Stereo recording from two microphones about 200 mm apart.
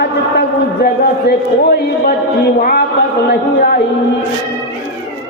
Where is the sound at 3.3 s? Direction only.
50° left (ahead or behind).